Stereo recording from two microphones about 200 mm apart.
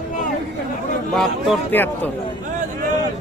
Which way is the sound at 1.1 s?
5° left (ahead or behind).